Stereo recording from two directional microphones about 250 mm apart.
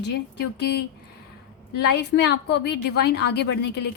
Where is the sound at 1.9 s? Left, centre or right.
Left.